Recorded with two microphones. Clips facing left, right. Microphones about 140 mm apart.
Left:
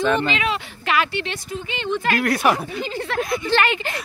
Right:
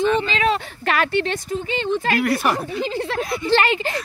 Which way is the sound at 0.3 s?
40° right (ahead or behind).